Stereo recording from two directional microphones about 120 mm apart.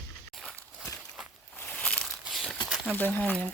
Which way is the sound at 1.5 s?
10° left (ahead or behind).